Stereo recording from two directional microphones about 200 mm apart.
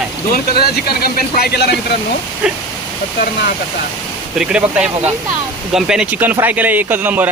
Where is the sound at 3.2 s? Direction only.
45° left (ahead or behind).